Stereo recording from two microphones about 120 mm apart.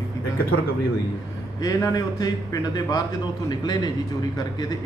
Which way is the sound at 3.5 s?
35° left (ahead or behind).